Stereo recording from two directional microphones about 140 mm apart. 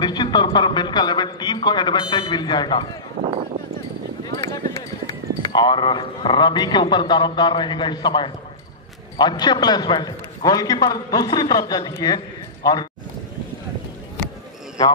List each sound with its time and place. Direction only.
0.0 s a man's voice: 30° left (ahead or behind)
4.3 s clip-clop: 25° left (ahead or behind)
5.5 s a man's voice: 30° left (ahead or behind)